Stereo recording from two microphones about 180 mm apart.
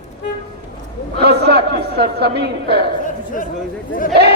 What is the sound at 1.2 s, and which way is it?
A man's voice, 65° right (ahead or behind).